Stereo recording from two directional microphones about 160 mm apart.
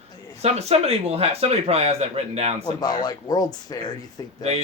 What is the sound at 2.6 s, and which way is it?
Speech, 25° left (ahead or behind).